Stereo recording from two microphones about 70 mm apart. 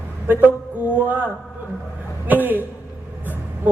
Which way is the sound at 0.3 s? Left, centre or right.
Right.